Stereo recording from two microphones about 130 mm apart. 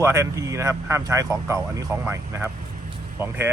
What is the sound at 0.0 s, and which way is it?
Speech, 20° right (ahead or behind).